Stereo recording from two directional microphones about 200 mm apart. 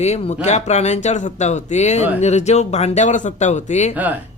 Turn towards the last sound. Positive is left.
turn(degrees=35)  # may be behind; listen again after turning